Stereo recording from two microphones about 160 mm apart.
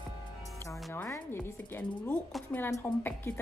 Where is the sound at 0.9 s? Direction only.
15° left (ahead or behind).